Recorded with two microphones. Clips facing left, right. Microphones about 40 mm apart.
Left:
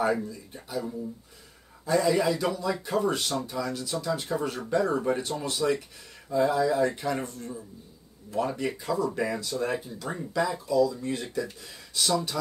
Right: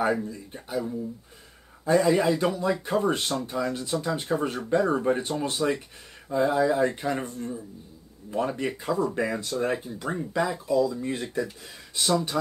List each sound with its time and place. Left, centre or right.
0.3 s speech: right
1.9 s speech: right
10.3 s speech: centre